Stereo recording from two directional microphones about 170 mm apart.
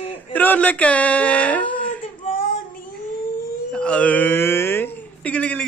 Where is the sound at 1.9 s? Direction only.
55° left (ahead or behind).